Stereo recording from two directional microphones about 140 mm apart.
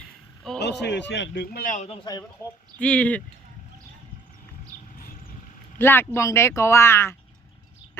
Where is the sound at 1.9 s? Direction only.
30° left (ahead or behind).